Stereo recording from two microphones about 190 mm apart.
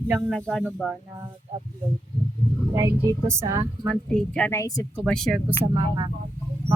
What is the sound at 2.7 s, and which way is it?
Speech, 15° right (ahead or behind).